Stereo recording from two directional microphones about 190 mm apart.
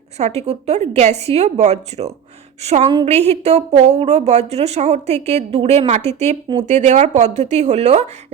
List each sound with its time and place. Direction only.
0.2 s a woman's voice: 35° right (ahead or behind)